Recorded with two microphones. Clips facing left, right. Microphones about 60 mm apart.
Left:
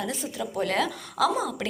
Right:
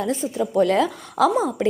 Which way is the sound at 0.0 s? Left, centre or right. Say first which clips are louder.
Right 8 dB; right.